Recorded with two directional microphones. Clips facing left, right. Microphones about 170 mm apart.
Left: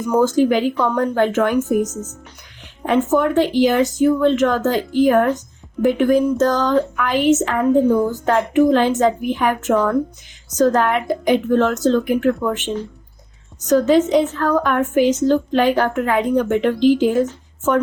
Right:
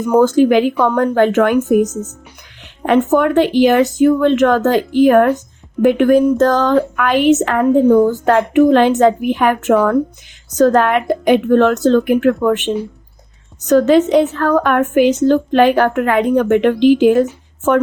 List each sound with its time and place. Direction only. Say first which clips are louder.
0.0 s a woman's voice: right 4 dB; 60° right (ahead or behind)
2.8 s a woman's voice: right 4 dB; 65° right (ahead or behind)